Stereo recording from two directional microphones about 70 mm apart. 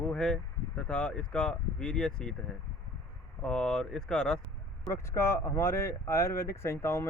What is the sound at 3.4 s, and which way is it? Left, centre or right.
Speech, centre.